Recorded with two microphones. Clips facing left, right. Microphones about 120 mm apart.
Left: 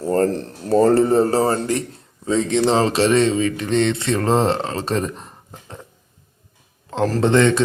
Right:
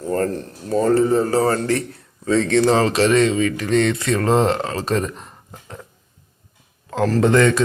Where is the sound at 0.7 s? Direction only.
40° left (ahead or behind).